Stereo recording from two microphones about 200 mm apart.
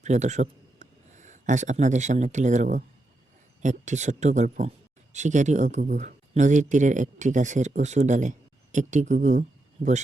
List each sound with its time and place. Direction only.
0.0 s a man's voice: 35° right (ahead or behind)